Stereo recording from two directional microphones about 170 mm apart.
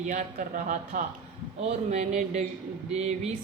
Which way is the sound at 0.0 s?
45° right (ahead or behind).